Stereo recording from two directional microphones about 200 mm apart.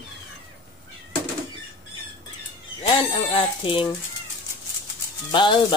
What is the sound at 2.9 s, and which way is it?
Speech, 25° left (ahead or behind).